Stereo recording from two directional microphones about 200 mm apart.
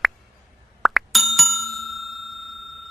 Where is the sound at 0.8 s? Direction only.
Centre (ahead or behind).